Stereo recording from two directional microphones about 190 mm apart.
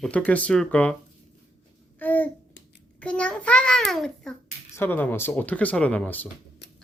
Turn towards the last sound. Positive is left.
turn(degrees=10)  # may be behind; listen again after turning